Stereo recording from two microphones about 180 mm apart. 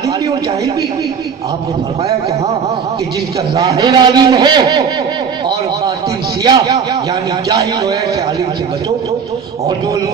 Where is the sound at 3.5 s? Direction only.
20° right (ahead or behind).